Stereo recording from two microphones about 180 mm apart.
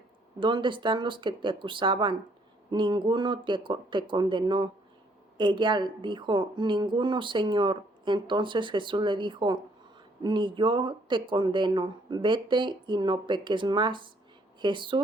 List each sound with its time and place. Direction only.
0.3 s a woman's voice: 25° right (ahead or behind)